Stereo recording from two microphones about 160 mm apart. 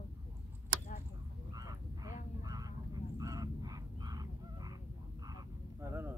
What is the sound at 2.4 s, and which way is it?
Vehicle, 25° right (ahead or behind).